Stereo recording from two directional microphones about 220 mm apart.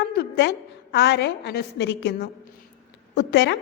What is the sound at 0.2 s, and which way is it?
A woman's voice, 50° left (ahead or behind).